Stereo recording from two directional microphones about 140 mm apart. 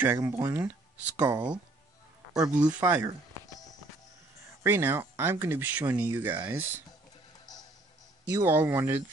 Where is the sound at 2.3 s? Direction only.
5° right (ahead or behind).